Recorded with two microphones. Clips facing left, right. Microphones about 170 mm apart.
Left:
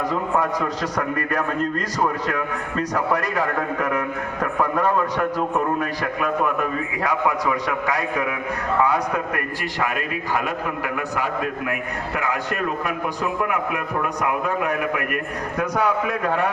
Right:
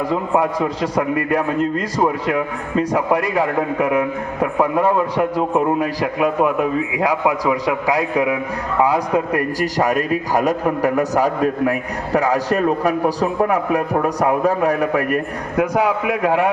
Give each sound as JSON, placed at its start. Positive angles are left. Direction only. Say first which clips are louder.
{"t": 0.1, "sound": "a man's voice", "louder": "right 4 dB", "side_deg": -25}
{"t": 2.2, "sound": "a man's voice", "louder": "right 5 dB", "side_deg": -10}
{"t": 2.9, "sound": "a man's voice", "louder": "right 4 dB", "side_deg": -25}
{"t": 5.5, "sound": "a man's voice", "louder": "right 5 dB", "side_deg": -15}
{"t": 7.9, "sound": "a man's voice", "louder": "right 6 dB", "side_deg": -25}